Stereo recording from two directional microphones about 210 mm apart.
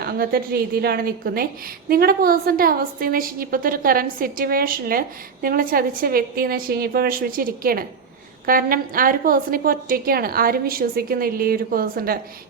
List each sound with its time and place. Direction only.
0.0 s a woman's voice: 45° right (ahead or behind)